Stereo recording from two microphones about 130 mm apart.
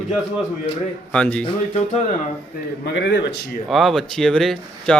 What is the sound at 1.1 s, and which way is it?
Speech, 10° left (ahead or behind).